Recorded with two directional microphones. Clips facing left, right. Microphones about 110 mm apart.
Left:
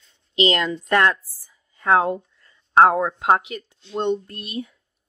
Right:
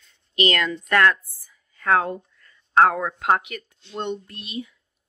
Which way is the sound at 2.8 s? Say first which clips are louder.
Left 3 dB; 25° left (ahead or behind).